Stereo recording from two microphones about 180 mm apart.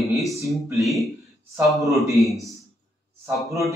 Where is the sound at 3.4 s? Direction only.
15° right (ahead or behind).